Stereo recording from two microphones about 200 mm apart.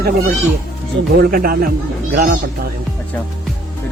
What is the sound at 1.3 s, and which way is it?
A man's voice, 45° right (ahead or behind).